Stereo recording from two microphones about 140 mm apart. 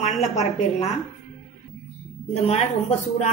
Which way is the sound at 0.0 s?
55° left (ahead or behind).